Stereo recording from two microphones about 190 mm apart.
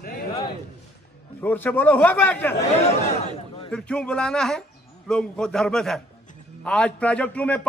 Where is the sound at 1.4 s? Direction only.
10° left (ahead or behind).